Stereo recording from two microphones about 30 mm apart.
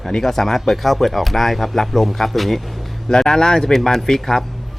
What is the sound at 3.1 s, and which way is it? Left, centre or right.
Speech, left.